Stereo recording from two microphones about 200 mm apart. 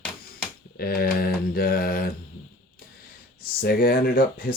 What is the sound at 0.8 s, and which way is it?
Speech, 50° left (ahead or behind).